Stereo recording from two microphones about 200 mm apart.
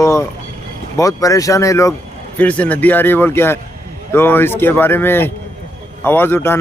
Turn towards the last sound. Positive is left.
turn(degrees=10)  # may be behind; listen again after turning